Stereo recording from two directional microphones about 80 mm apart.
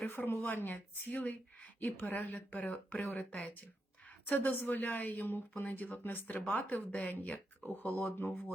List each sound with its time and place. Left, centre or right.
0.0 s a woman's voice: left